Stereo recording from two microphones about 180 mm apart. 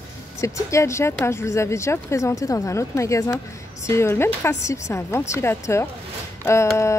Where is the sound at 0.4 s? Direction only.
15° left (ahead or behind).